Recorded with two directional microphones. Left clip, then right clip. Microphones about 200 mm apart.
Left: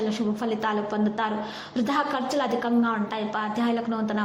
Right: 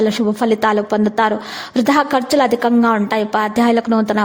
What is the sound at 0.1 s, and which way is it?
A woman's voice, 45° right (ahead or behind).